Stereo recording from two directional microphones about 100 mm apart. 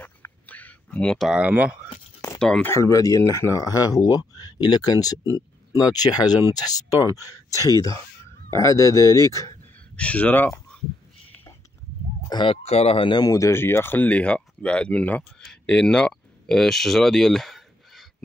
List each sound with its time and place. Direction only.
0.5 s a sound: 15° left (ahead or behind)
1.3 s speech: 15° right (ahead or behind)
2.3 s a sound: 5° left (ahead or behind)
2.6 s speech: 30° left (ahead or behind)
5.2 s a sound: 30° right (ahead or behind)
5.8 s speech: 40° left (ahead or behind)
8.7 s speech: 30° left (ahead or behind)
9.9 s speech: 15° left (ahead or behind)
12.3 s speech: 50° left (ahead or behind)
12.6 s speech: 90° left; by 13.2 s 65° left (ahead or behind)
13.2 s speech: 35° left (ahead or behind); by 18.0 s centre (ahead or behind)